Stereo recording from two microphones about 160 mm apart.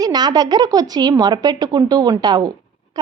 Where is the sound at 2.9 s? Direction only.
25° right (ahead or behind).